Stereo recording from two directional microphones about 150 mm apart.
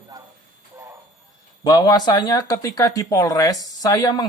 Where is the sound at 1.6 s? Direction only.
30° left (ahead or behind).